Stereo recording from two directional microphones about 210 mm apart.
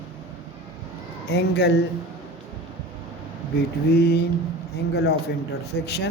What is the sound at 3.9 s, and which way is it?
Speech, 50° left (ahead or behind).